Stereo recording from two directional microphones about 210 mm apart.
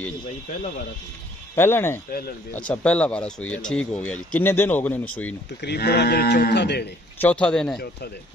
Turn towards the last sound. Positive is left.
turn(degrees=5)  # may be behind; listen again after turning